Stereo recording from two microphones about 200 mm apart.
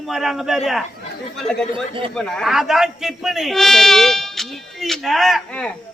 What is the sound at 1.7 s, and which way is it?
Speech, 25° right (ahead or behind).